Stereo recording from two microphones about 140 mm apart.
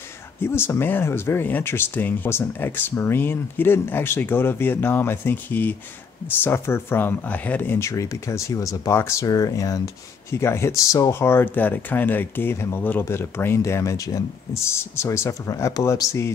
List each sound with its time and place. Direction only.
0.4 s speech: 15° left (ahead or behind)